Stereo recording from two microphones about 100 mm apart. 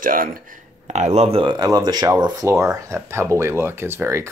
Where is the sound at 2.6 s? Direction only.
30° right (ahead or behind).